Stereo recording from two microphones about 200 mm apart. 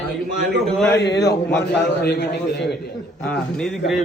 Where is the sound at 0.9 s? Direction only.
60° left (ahead or behind).